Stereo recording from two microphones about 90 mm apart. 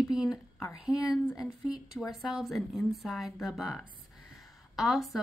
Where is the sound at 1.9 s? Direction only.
Centre (ahead or behind).